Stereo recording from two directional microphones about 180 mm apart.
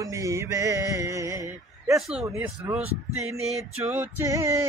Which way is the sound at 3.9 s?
15° right (ahead or behind).